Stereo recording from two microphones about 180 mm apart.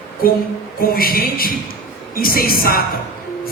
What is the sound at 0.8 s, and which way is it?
Speech, 55° left (ahead or behind).